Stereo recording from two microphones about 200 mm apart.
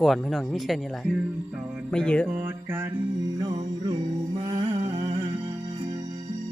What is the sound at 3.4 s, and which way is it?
Music, 20° right (ahead or behind).